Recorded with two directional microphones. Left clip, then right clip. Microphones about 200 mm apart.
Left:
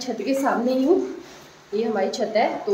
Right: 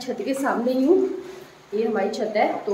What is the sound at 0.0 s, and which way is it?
Speech, 5° left (ahead or behind).